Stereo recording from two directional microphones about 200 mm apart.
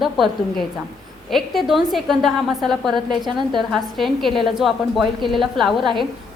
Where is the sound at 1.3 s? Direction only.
Centre (ahead or behind).